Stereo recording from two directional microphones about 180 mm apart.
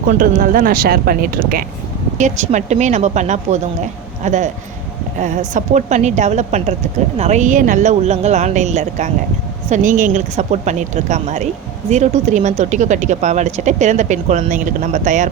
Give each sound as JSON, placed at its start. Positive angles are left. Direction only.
{"t": 0.2, "sound": "speech", "side_deg": -50}
{"t": 2.1, "sound": "speech", "side_deg": -40}